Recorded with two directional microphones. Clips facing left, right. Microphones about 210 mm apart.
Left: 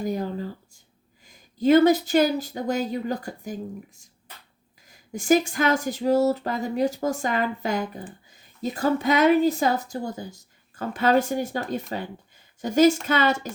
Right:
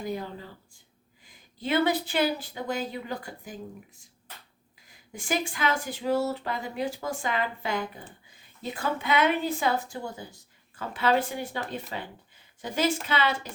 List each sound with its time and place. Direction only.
0.0 s speech: 45° left (ahead or behind)
4.9 s speech: 45° left (ahead or behind)